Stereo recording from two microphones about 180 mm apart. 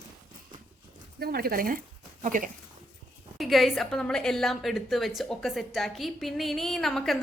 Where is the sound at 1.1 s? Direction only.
60° right (ahead or behind).